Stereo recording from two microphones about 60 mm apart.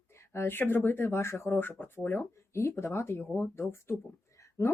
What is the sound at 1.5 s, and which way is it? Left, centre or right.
Speech, left.